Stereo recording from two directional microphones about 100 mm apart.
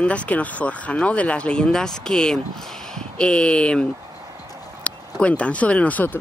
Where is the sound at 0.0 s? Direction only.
15° left (ahead or behind).